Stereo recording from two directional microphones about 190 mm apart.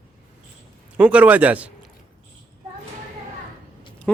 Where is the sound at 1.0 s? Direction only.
5° right (ahead or behind).